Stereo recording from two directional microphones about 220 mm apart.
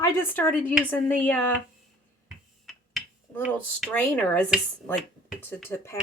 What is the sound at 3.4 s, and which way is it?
Speech, centre (ahead or behind).